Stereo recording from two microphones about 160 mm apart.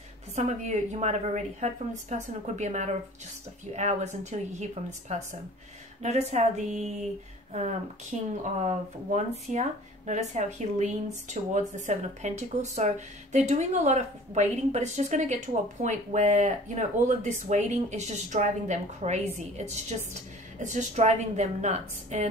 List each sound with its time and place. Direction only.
0.4 s a woman's voice: 45° right (ahead or behind)
8.1 s a woman's voice: 45° right (ahead or behind)